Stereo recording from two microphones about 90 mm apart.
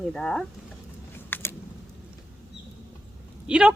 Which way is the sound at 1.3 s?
20° left (ahead or behind).